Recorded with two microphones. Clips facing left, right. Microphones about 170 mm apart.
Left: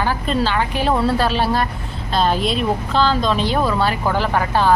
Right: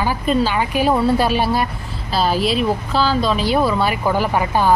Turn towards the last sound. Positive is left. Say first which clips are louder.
# right 1 dB
turn(degrees=-10)  # may be behind; listen again after turning